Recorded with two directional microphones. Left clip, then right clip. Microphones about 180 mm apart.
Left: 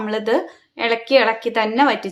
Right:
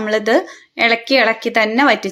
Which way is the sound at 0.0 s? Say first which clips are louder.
Right 5 dB; 20° right (ahead or behind).